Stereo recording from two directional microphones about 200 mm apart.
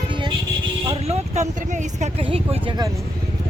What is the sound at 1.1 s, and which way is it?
Speech, 35° right (ahead or behind).